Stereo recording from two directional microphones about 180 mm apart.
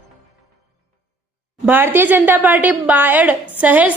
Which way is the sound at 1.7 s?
10° right (ahead or behind).